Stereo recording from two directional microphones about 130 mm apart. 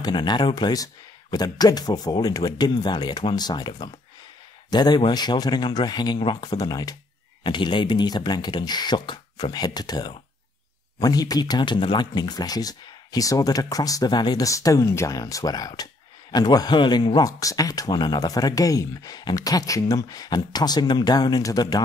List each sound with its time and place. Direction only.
0.0 s speech: 35° left (ahead or behind)